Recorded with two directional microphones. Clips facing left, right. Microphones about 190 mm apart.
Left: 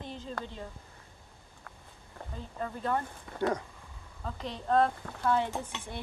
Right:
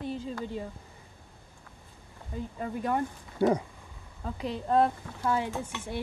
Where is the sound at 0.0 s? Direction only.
5° right (ahead or behind).